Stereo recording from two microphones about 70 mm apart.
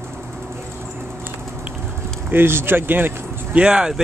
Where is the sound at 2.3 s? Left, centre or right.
Right.